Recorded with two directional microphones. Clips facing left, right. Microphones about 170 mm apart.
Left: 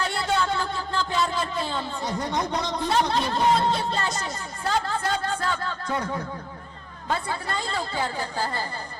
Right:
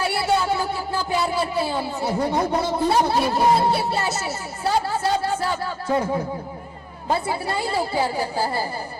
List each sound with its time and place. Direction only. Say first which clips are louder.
0.0 s a sound: right 4 dB; 10° right (ahead or behind)
2.6 s speech: right 4 dB; 10° right (ahead or behind)
6.0 s speech: right 6 dB; 25° right (ahead or behind)
7.3 s speech: right 5 dB; 10° right (ahead or behind)